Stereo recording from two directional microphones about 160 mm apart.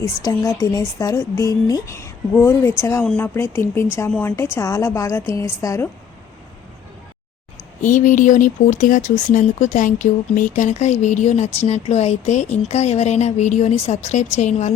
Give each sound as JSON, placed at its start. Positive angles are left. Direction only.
{"t": 0.2, "sound": "speech", "side_deg": 20}
{"t": 7.8, "sound": "speech", "side_deg": 50}